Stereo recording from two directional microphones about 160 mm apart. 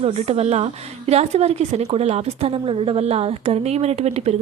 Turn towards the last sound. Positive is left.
turn(degrees=-40)  # may be behind; listen again after turning